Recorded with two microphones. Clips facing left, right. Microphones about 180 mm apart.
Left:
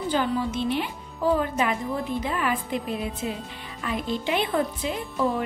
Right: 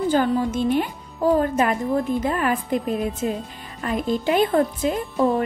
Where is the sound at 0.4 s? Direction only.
45° right (ahead or behind).